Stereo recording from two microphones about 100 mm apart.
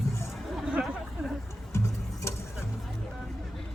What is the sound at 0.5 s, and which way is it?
Chatter, 5° right (ahead or behind).